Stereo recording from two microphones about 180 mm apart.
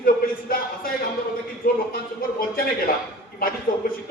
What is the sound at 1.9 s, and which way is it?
A man's voice, 55° left (ahead or behind).